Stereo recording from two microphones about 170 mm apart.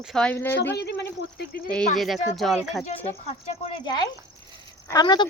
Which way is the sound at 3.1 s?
30° left (ahead or behind).